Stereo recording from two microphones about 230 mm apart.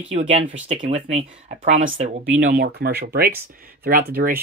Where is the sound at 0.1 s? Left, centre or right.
Right.